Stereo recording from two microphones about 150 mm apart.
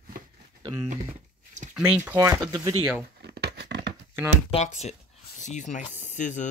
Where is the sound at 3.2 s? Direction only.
90° right.